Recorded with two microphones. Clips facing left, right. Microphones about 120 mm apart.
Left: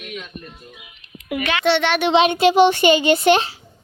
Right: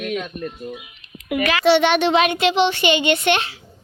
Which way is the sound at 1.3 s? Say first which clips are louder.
Right 2 dB; 25° left (ahead or behind).